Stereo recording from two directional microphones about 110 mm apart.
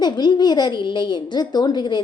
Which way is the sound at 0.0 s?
40° left (ahead or behind).